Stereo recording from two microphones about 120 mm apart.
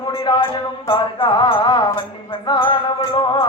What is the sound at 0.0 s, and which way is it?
Music, 35° left (ahead or behind).